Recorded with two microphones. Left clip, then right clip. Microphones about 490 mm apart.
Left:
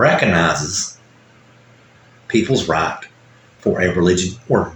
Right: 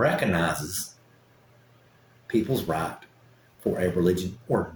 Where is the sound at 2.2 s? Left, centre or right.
Right.